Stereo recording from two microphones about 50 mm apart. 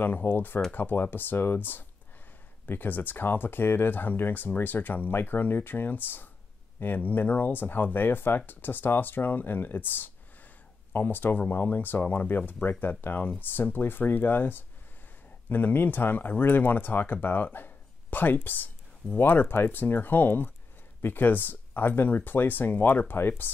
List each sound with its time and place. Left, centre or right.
0.0 s speech: left